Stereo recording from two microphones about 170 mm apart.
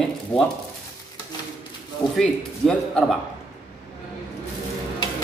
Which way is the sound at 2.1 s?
Centre (ahead or behind).